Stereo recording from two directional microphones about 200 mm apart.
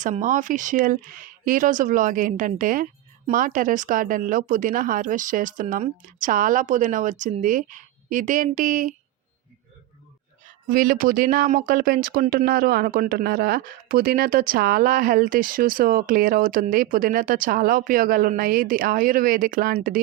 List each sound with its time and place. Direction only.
0.0 s speech: 40° right (ahead or behind)
10.4 s speech: 45° right (ahead or behind)